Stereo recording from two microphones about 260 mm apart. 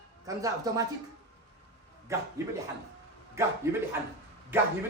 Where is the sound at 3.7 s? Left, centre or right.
Centre.